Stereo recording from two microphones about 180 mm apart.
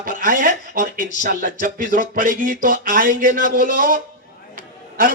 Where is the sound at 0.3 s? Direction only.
45° right (ahead or behind).